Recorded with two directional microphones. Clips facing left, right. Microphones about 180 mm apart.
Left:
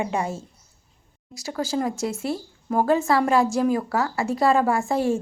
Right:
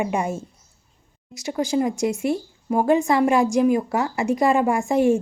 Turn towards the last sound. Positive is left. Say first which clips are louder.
# right 4 dB
turn(degrees=-15)  # may be behind; listen again after turning